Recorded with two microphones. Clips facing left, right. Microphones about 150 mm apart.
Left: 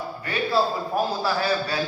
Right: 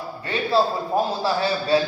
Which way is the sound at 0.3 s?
25° right (ahead or behind).